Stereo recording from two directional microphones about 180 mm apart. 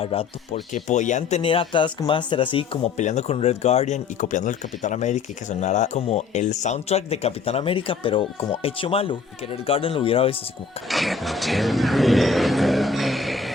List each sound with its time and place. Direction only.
0.0 s speech: 30° left (ahead or behind)
3.0 s speech: 40° left (ahead or behind)
10.8 s speech: centre (ahead or behind)